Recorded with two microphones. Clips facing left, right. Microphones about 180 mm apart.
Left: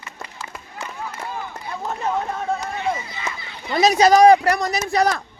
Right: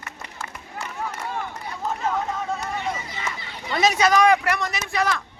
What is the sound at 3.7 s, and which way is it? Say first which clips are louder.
Speech: left 5 dB; 35° left (ahead or behind).